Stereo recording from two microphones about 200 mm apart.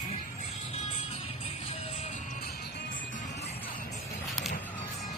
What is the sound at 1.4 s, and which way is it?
Music, 30° left (ahead or behind).